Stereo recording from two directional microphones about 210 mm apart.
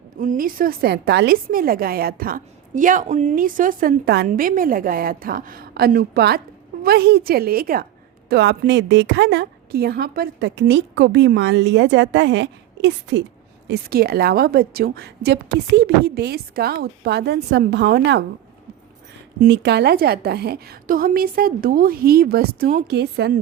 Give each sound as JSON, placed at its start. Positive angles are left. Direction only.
{"t": 0.2, "sound": "a woman's voice", "side_deg": -40}
{"t": 13.7, "sound": "a woman's voice", "side_deg": -50}
{"t": 19.4, "sound": "a woman's voice", "side_deg": -50}